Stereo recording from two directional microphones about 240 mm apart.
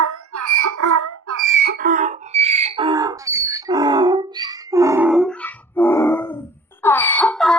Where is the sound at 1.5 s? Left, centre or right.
Right; by 6.4 s centre.